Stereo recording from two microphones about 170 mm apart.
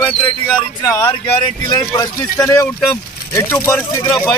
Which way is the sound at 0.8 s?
20° left (ahead or behind).